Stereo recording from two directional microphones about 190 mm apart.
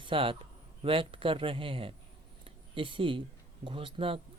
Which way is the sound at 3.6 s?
25° right (ahead or behind).